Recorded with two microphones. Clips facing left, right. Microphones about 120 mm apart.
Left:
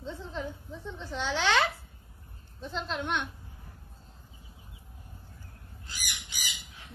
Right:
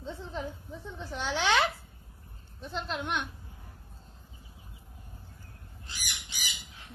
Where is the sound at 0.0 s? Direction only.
15° right (ahead or behind).